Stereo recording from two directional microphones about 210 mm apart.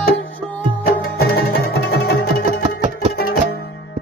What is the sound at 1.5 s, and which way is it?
Music, 50° left (ahead or behind).